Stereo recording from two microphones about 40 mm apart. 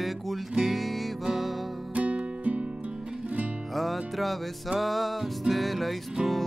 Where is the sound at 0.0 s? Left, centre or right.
Centre.